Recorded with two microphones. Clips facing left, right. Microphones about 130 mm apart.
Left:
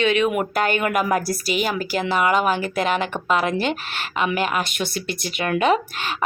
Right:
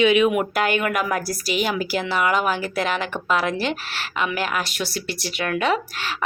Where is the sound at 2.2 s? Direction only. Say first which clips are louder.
Left 2 dB; 5° right (ahead or behind).